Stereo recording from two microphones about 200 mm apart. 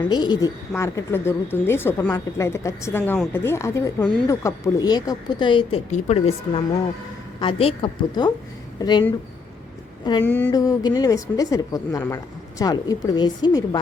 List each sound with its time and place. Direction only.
0.0 s a woman's voice: 20° left (ahead or behind)
10.2 s speech: 10° left (ahead or behind)